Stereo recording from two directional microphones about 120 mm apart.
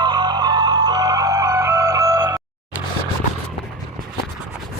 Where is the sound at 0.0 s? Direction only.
40° right (ahead or behind).